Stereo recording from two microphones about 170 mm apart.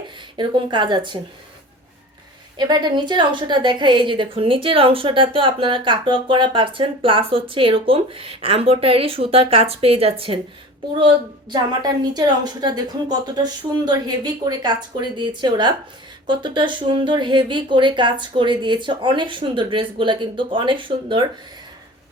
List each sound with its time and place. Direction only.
0.3 s speech: 25° right (ahead or behind)
2.6 s a woman's voice: 25° right (ahead or behind)